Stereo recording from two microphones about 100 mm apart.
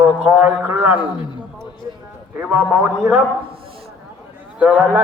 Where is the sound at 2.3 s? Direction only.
10° right (ahead or behind).